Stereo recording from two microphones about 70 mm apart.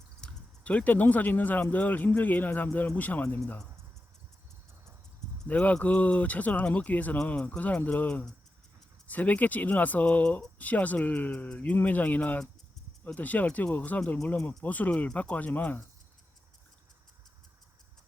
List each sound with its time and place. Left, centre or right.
0.2 s speech: centre
5.5 s speech: left